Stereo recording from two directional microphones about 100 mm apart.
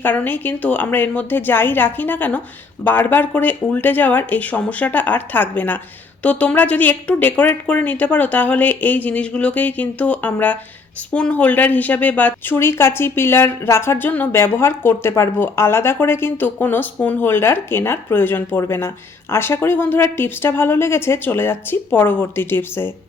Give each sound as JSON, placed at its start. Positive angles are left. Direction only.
{"t": 0.0, "sound": "a woman's voice", "side_deg": 20}